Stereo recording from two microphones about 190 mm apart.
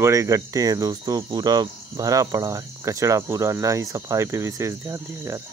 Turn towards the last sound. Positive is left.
turn(degrees=-15)  # may be behind; listen again after turning